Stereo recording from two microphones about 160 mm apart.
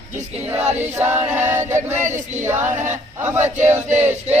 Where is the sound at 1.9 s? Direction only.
50° right (ahead or behind).